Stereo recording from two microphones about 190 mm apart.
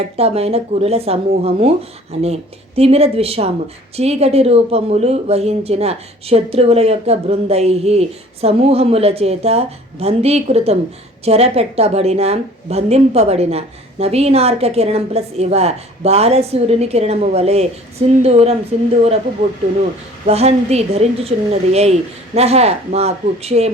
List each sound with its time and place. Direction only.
0.0 s speech: 35° right (ahead or behind)
20.2 s speech: 35° right (ahead or behind)